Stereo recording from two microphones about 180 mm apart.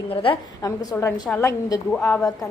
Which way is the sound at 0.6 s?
15° left (ahead or behind).